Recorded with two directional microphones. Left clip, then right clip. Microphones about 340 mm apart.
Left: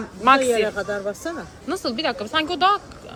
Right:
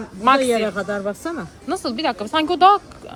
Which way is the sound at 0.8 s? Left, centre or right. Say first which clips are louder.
Right 2 dB; right.